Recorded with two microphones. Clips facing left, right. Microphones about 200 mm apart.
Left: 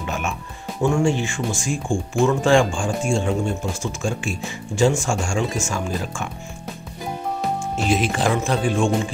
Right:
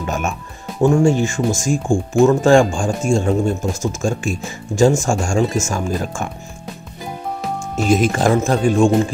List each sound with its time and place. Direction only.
0.0 s music: 45° right (ahead or behind)
0.8 s speech: 40° right (ahead or behind)
7.9 s speech: 45° right (ahead or behind)